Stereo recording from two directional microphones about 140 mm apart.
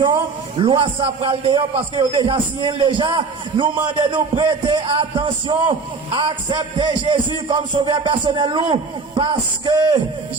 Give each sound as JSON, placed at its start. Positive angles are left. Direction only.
{"t": 0.6, "sound": "a man's voice", "side_deg": -35}